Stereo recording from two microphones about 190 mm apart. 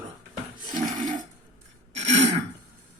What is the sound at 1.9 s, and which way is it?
Throat clearing, 35° right (ahead or behind).